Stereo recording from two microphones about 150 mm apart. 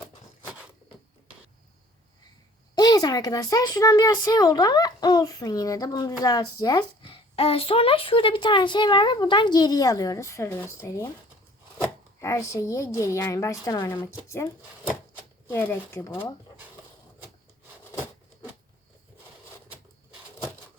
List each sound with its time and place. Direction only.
2.7 s speech: 25° left (ahead or behind)
12.2 s speech: 20° left (ahead or behind)